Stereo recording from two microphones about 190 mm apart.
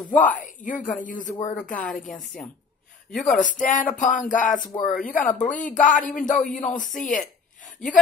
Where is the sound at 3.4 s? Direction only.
45° left (ahead or behind).